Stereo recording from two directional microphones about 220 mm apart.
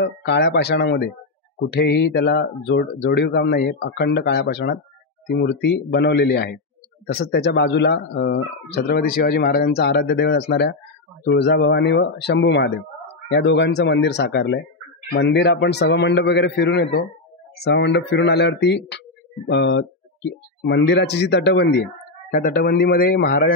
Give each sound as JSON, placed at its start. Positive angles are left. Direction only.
{"t": 0.0, "sound": "speech", "side_deg": 50}
{"t": 22.3, "sound": "speech", "side_deg": 40}